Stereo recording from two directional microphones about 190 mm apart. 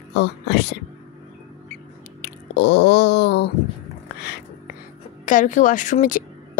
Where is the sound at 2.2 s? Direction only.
65° left (ahead or behind).